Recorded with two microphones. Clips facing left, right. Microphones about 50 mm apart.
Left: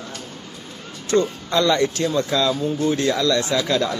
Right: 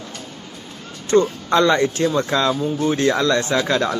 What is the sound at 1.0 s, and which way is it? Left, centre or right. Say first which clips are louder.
Speech: right 4 dB; right.